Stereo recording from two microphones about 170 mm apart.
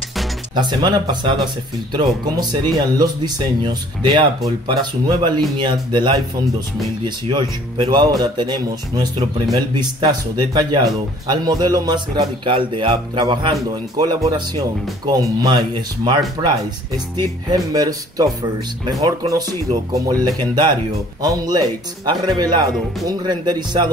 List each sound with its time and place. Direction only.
0.6 s a man's voice: 25° right (ahead or behind)
7.2 s a man's voice: 25° right (ahead or behind)